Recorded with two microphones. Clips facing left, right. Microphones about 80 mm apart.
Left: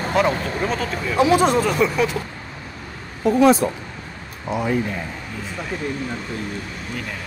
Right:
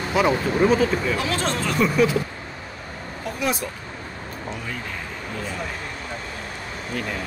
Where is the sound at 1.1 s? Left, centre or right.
Centre.